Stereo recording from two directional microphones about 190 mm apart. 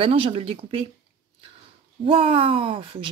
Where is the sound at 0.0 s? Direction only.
30° right (ahead or behind).